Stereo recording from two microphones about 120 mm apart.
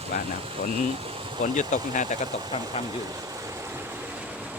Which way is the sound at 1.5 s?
90° left.